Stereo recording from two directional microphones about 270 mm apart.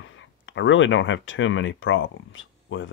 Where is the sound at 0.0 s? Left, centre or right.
Left.